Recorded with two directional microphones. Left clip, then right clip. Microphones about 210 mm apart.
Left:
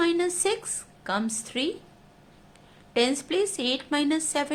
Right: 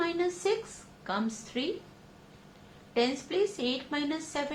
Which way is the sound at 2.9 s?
55° left (ahead or behind).